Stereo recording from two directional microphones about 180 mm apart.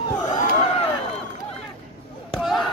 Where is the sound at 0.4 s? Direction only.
40° left (ahead or behind).